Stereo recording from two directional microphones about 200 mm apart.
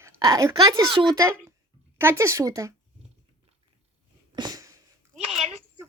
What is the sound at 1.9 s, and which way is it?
Speech, 10° right (ahead or behind).